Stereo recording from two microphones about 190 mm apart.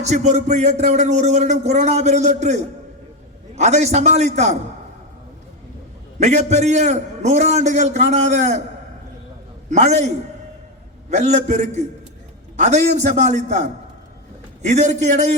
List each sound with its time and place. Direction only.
0.0 s speech: 35° right (ahead or behind)
6.1 s speech: 35° right (ahead or behind)
9.6 s speech: 35° right (ahead or behind)
11.1 s speech: 35° right (ahead or behind)
14.7 s speech: 40° right (ahead or behind)